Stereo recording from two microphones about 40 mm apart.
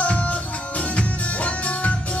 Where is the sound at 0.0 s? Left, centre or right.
Left.